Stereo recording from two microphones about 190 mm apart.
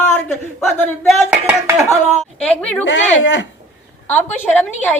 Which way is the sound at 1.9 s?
35° left (ahead or behind).